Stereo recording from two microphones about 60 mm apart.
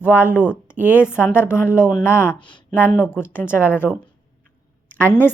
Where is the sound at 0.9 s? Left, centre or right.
Left.